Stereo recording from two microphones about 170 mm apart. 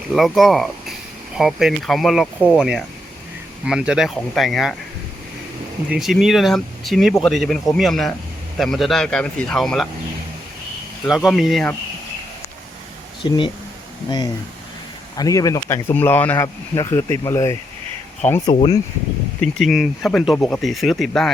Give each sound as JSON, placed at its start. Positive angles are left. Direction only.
{"t": 0.1, "sound": "speech", "side_deg": 0}
{"t": 5.9, "sound": "speech", "side_deg": 0}
{"t": 11.0, "sound": "speech", "side_deg": 0}
{"t": 13.2, "sound": "speech", "side_deg": 30}
{"t": 15.2, "sound": "speech", "side_deg": 20}
{"t": 19.4, "sound": "speech", "side_deg": 0}